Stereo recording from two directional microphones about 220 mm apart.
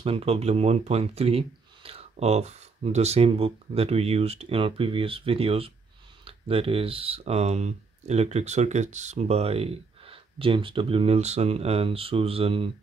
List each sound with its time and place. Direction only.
0.0 s speech: 25° right (ahead or behind)